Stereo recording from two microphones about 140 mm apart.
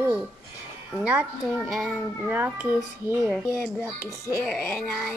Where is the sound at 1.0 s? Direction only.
10° right (ahead or behind).